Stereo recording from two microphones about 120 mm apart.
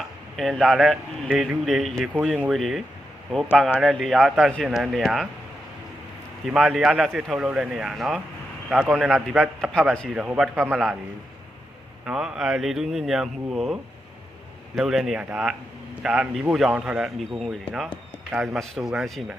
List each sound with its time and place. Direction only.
0.3 s speech: centre (ahead or behind)
6.4 s a man's voice: centre (ahead or behind)
9.9 s speech: 5° left (ahead or behind)
10.2 s a man's voice: 5° right (ahead or behind)
10.5 s a man's voice: 20° right (ahead or behind)
12.0 s speech: 5° right (ahead or behind)
14.8 s speech: 5° right (ahead or behind)